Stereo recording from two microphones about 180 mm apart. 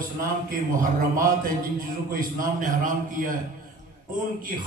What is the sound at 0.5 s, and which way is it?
A man's voice, 50° right (ahead or behind).